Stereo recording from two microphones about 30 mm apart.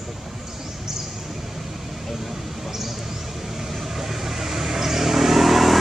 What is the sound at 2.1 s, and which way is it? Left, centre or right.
Vehicle, centre.